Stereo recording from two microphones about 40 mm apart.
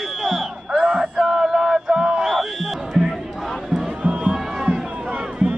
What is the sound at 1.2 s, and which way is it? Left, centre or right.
Chant, centre.